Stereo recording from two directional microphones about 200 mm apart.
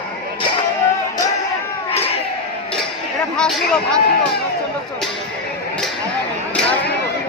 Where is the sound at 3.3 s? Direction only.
5° left (ahead or behind).